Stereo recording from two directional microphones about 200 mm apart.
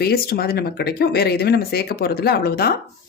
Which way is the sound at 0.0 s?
50° left (ahead or behind).